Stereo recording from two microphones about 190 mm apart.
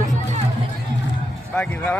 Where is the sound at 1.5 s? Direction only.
5° left (ahead or behind).